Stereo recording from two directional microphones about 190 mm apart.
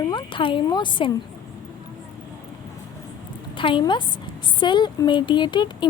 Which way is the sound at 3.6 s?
25° left (ahead or behind).